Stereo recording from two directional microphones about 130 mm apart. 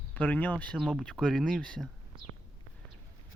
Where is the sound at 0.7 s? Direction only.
Centre (ahead or behind).